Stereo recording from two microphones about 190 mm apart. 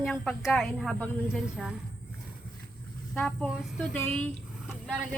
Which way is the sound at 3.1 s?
5° left (ahead or behind).